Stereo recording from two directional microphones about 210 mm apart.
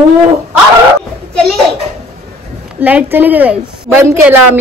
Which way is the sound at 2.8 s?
10° right (ahead or behind).